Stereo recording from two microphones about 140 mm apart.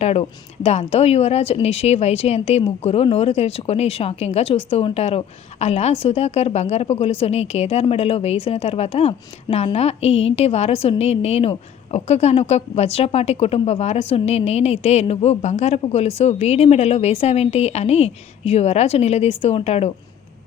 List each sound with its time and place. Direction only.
0.0 s speech: 50° left (ahead or behind)